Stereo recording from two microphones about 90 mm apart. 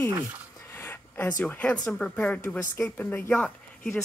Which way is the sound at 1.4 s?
15° left (ahead or behind).